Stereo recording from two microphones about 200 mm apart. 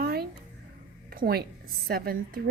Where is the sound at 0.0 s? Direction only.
50° right (ahead or behind).